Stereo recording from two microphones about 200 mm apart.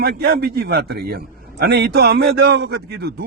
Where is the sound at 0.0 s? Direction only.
50° right (ahead or behind).